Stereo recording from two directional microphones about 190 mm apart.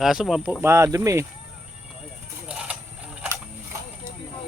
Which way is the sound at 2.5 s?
5° right (ahead or behind).